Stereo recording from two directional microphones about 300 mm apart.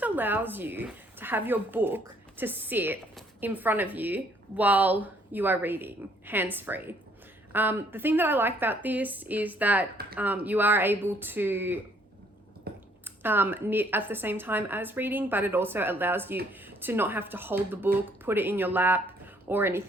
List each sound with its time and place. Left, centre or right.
0.0 s speech: centre
12.7 s a sound: right
13.1 s speech: centre